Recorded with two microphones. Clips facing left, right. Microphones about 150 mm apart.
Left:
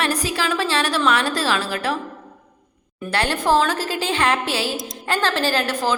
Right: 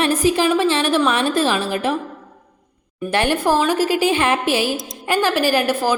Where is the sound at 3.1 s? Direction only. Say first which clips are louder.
Right 2 dB; 15° right (ahead or behind).